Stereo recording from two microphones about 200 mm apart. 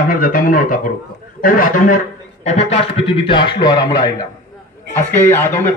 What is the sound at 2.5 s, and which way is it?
A man's voice, 30° left (ahead or behind).